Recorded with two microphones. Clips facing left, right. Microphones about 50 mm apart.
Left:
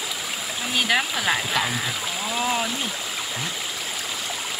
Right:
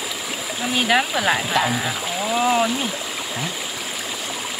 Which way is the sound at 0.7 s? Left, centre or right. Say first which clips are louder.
Right 3 dB; centre.